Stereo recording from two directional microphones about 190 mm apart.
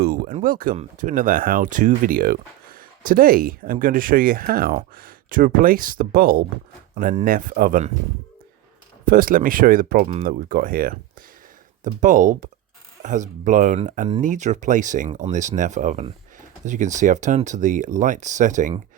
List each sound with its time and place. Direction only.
0.0 s speech: 50° right (ahead or behind)
9.0 s speech: 45° right (ahead or behind)